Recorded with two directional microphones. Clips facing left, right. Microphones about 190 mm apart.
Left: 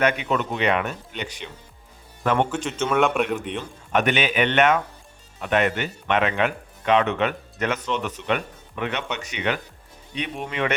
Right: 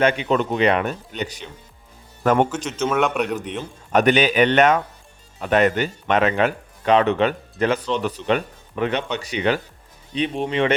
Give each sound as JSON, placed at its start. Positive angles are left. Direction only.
{"t": 0.0, "sound": "speech", "side_deg": -30}
{"t": 2.6, "sound": "a man's voice", "side_deg": 0}
{"t": 3.9, "sound": "speech", "side_deg": -35}